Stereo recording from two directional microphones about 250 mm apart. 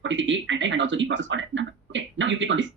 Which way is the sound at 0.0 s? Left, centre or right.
Right.